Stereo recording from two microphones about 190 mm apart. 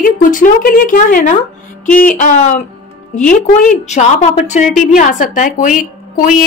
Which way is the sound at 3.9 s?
35° left (ahead or behind).